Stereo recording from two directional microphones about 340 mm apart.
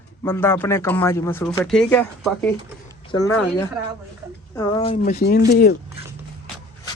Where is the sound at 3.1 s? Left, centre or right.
Left.